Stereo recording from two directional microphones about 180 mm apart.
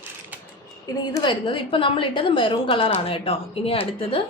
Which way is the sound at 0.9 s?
25° left (ahead or behind).